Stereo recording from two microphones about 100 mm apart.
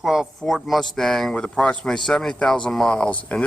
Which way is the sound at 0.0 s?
Centre (ahead or behind).